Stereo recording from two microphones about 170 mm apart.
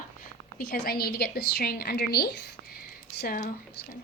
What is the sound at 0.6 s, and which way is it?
A woman's voice, 65° left (ahead or behind).